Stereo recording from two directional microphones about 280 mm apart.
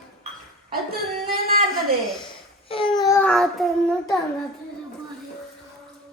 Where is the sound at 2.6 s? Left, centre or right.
Centre.